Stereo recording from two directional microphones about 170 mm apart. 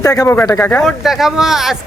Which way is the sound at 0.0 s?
20° left (ahead or behind).